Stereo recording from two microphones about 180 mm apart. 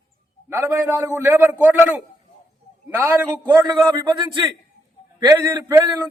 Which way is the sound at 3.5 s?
20° right (ahead or behind).